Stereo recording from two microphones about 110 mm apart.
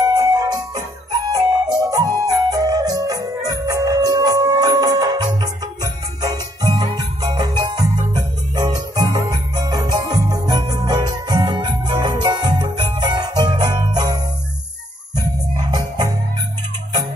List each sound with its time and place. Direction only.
0.1 s music: 35° right (ahead or behind)
15.1 s jingle bell: 40° right (ahead or behind)